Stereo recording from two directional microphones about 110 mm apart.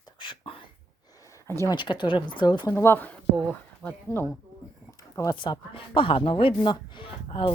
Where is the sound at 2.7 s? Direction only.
25° left (ahead or behind).